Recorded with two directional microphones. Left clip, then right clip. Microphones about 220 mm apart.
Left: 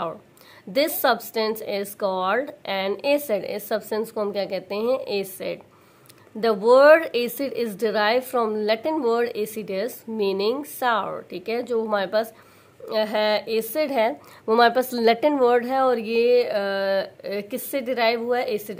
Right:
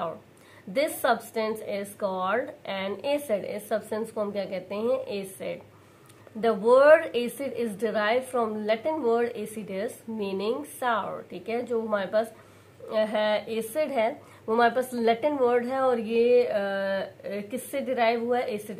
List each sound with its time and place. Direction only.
0.7 s a woman's voice: 45° left (ahead or behind)